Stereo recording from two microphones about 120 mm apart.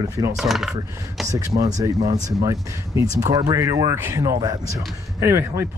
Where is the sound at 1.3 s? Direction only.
30° right (ahead or behind).